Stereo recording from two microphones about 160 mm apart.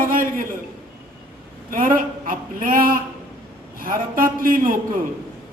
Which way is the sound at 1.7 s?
60° right (ahead or behind).